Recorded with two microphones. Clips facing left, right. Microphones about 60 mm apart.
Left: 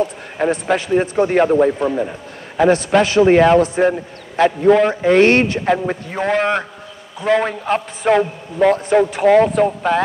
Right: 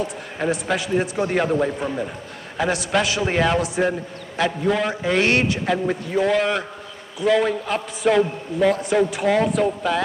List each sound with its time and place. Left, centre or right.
0.4 s a man's voice: left